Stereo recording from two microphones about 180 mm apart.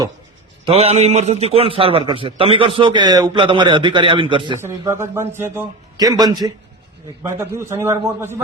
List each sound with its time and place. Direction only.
0.6 s a man's voice: 35° right (ahead or behind)
4.9 s a man's voice: 15° right (ahead or behind)